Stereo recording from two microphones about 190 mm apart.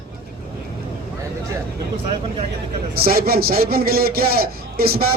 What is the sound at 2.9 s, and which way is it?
A man's voice, 50° right (ahead or behind).